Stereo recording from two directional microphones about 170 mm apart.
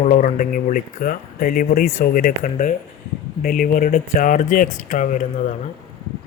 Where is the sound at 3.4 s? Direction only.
60° left (ahead or behind).